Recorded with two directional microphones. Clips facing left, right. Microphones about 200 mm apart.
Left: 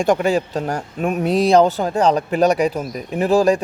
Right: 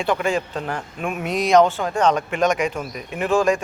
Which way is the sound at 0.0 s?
40° left (ahead or behind).